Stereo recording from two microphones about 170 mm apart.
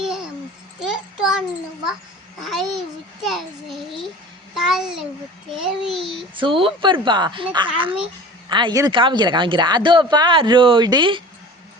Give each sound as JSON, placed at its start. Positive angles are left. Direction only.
{"t": 0.0, "sound": "a sound", "side_deg": -5}
{"t": 2.4, "sound": "a child's voice", "side_deg": 0}
{"t": 6.1, "sound": "a woman's voice", "side_deg": -30}